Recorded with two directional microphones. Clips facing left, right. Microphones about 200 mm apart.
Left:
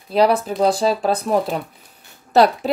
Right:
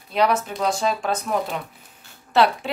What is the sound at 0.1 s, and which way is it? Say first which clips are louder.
A woman's voice: left 5 dB; 35° left (ahead or behind).